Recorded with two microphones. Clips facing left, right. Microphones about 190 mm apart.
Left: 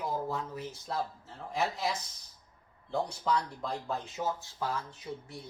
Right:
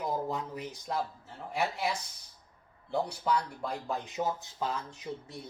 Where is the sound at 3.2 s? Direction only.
10° right (ahead or behind).